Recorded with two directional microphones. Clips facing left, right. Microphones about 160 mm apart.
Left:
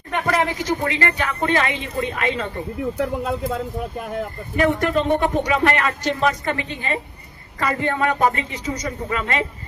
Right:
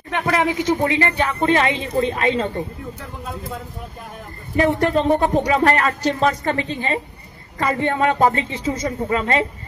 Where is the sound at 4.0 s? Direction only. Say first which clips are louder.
Left 9 dB; 90° left.